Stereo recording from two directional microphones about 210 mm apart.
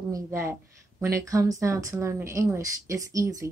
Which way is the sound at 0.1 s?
15° right (ahead or behind).